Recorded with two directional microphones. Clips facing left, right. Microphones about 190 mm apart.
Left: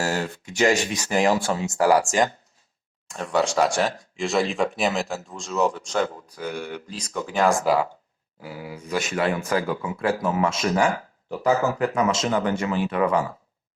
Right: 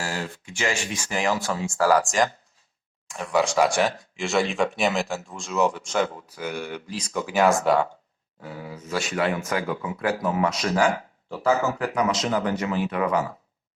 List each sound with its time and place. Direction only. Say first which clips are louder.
0.0 s speech: left 5 dB; 40° left (ahead or behind); by 2.0 s 15° left (ahead or behind)
3.1 s speech: even; 5° right (ahead or behind); by 9.0 s 10° left (ahead or behind)
9.1 s speech: left 2 dB; 30° left (ahead or behind)